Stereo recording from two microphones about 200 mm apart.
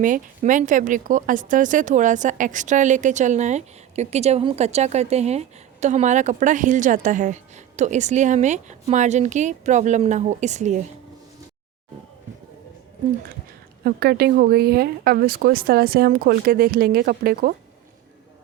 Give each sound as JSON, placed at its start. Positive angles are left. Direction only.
{"t": 0.0, "sound": "a woman's voice", "side_deg": -40}
{"t": 13.8, "sound": "speech", "side_deg": -50}